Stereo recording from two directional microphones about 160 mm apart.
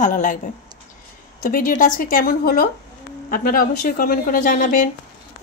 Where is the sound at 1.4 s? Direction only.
60° left (ahead or behind).